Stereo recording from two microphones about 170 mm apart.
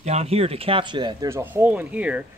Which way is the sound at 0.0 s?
40° right (ahead or behind).